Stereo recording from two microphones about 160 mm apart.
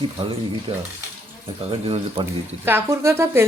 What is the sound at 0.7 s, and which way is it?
Speech, 35° right (ahead or behind).